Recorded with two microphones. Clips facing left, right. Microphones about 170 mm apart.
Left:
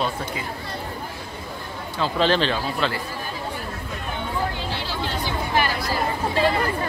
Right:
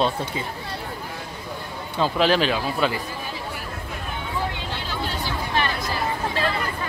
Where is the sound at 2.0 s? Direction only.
5° right (ahead or behind).